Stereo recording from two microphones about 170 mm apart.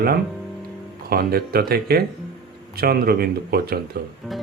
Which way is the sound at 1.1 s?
65° right (ahead or behind).